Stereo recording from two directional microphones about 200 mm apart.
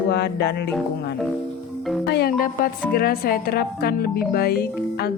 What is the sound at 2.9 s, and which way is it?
Speech, 50° left (ahead or behind).